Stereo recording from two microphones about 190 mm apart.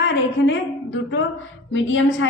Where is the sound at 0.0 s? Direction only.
75° left (ahead or behind).